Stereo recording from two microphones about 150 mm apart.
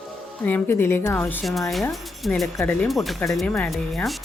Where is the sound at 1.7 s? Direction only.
Centre (ahead or behind).